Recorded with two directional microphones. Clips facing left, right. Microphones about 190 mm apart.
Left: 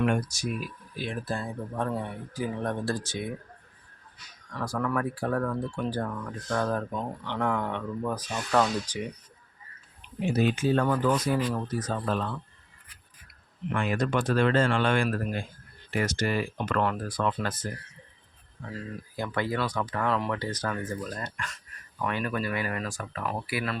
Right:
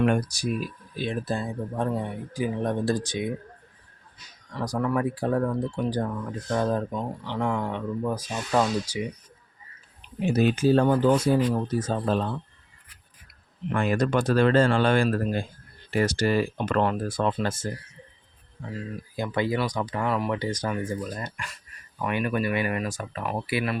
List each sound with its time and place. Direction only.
0.0 s speech: 35° right (ahead or behind); by 3.3 s 15° right (ahead or behind)
4.6 s speech: 20° right (ahead or behind)
10.2 s speech: 45° right (ahead or behind); by 12.4 s 30° right (ahead or behind)
13.7 s speech: 40° right (ahead or behind)
19.1 s speech: 15° right (ahead or behind)